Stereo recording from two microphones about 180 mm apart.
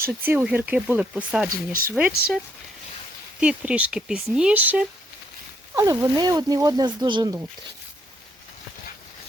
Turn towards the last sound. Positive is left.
turn(degrees=-20)  # may be behind; listen again after turning